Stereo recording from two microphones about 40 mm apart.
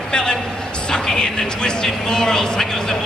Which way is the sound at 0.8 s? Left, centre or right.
Centre.